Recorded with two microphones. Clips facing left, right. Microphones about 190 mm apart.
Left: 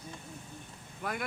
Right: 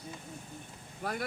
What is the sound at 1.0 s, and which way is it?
Speech, 40° right (ahead or behind).